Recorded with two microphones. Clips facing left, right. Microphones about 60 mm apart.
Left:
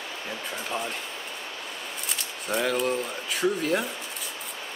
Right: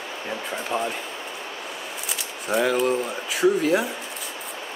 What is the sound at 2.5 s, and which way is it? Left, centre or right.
Speech, centre.